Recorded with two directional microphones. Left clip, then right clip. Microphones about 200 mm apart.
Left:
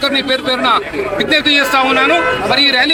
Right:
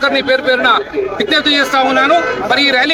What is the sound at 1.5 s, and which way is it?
A man's voice, centre (ahead or behind).